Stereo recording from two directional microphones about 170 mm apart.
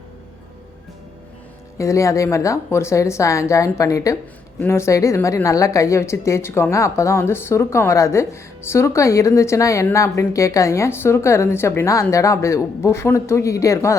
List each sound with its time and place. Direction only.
1.8 s speech: 20° left (ahead or behind)